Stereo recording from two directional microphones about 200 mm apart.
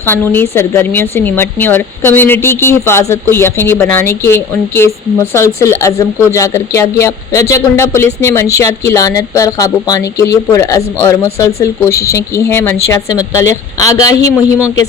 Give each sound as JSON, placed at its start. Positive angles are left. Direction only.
{"t": 0.0, "sound": "a woman's voice", "side_deg": 10}